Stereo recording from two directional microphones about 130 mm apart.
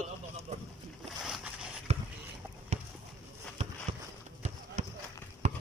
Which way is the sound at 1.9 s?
55° right (ahead or behind).